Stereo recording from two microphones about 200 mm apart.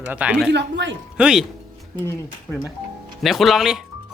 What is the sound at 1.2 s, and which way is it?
Speech, centre (ahead or behind).